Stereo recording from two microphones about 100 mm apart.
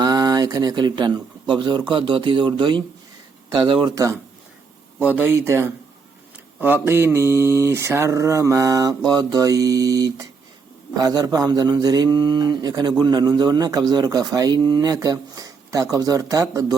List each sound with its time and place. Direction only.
0.0 s speech: 40° right (ahead or behind)
3.7 s speech: 60° right (ahead or behind)
4.9 s speech: 15° right (ahead or behind)
5.3 s mantra: 25° right (ahead or behind)
9.0 s a man's voice: 40° right (ahead or behind)